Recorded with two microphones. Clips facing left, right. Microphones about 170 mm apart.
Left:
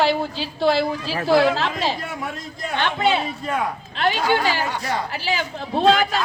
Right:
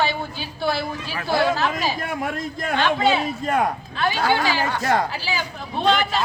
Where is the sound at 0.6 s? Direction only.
90° left.